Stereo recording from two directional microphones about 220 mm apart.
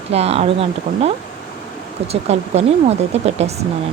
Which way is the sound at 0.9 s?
40° right (ahead or behind).